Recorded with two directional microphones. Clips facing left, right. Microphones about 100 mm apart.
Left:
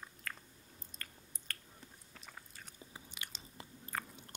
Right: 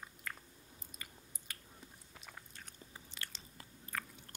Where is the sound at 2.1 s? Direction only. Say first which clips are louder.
Even; centre (ahead or behind).